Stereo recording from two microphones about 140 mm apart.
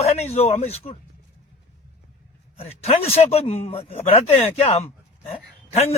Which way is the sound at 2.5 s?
45° left (ahead or behind).